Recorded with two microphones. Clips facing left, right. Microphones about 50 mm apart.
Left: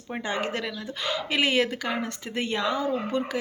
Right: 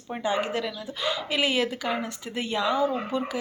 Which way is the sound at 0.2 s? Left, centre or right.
Left.